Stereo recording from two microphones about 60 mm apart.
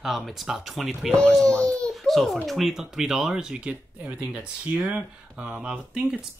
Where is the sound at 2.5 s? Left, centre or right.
Centre.